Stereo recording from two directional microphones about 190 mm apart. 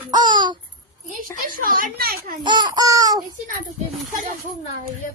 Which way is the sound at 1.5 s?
50° right (ahead or behind).